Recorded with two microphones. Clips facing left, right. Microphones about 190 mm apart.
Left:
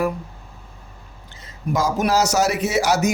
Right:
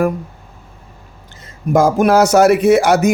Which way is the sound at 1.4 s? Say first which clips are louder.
Right 9 dB; 50° right (ahead or behind).